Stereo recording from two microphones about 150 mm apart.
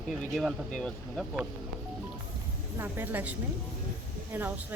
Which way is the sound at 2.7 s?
15° right (ahead or behind).